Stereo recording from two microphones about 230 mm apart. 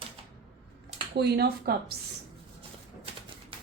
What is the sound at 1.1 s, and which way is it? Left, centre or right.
Speech, right.